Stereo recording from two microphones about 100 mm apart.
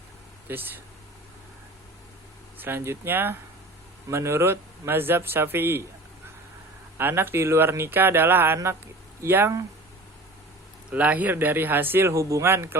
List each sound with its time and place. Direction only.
0.4 s speech: 20° right (ahead or behind)
2.6 s speech: 25° right (ahead or behind)
7.0 s speech: 20° right (ahead or behind)
10.9 s speech: 15° right (ahead or behind)